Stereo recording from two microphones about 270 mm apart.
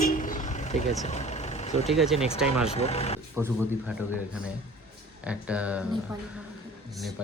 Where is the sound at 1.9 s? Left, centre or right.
Centre.